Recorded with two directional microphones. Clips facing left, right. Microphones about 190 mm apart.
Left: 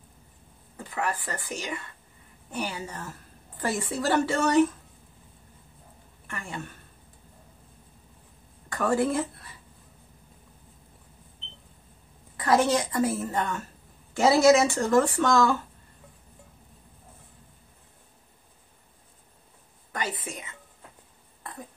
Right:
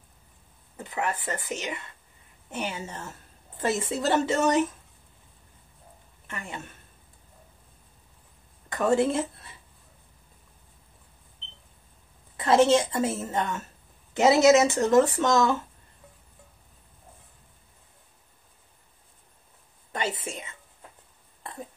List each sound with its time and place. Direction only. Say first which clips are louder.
0.7 s a woman's voice: even; 20° right (ahead or behind)
6.2 s a woman's voice: left 1 dB; 20° right (ahead or behind)
8.6 s a woman's voice: right 2 dB; 20° right (ahead or behind)
12.4 s a woman's voice: right 3 dB; 25° right (ahead or behind)
19.9 s a sound: right 2 dB; 25° right (ahead or behind)